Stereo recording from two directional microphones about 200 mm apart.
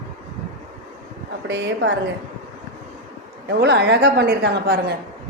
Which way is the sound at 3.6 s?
55° right (ahead or behind).